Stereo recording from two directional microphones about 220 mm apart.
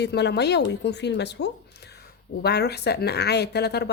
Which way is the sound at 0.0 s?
50° left (ahead or behind).